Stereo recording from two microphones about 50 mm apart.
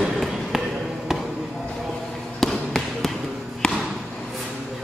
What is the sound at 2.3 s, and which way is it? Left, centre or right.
Basketball bounce, centre.